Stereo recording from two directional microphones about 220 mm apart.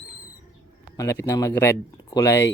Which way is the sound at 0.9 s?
10° left (ahead or behind).